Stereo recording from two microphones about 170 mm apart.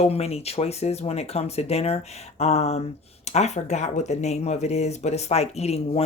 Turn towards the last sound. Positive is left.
turn(degrees=40)  # may be behind; listen again after turning